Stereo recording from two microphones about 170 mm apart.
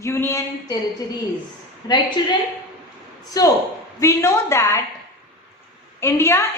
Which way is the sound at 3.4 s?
20° left (ahead or behind).